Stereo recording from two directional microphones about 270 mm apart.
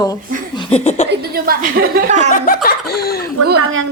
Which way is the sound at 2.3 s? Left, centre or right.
Left.